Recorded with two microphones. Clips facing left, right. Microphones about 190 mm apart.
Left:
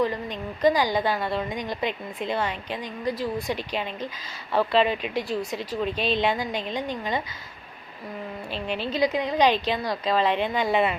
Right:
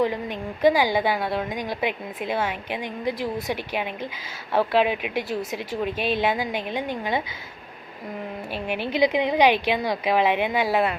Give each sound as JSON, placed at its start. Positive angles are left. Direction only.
{"t": 0.6, "sound": "a woman's voice", "side_deg": -10}
{"t": 8.5, "sound": "a woman's voice", "side_deg": -10}